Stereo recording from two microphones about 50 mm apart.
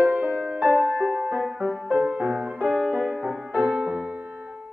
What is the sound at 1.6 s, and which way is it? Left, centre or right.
Music, right.